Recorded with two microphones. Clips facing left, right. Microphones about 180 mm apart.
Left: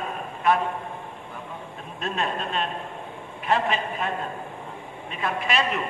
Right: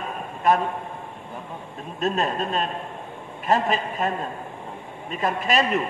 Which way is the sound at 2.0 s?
40° right (ahead or behind).